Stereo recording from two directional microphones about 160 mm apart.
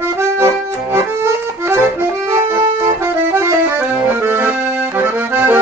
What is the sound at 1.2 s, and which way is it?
Music, 15° right (ahead or behind).